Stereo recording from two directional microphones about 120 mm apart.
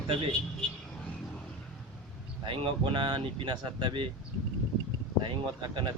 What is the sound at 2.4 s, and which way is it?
A man's voice, 45° right (ahead or behind).